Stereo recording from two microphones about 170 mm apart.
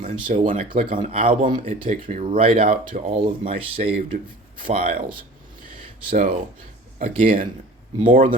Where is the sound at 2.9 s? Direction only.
50° right (ahead or behind).